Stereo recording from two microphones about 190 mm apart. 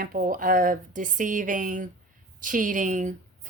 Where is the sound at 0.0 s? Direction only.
45° right (ahead or behind).